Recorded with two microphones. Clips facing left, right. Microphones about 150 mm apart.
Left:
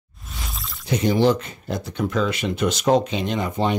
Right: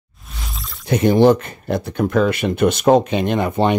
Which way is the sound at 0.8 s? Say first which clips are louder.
Right 6 dB; 55° right (ahead or behind).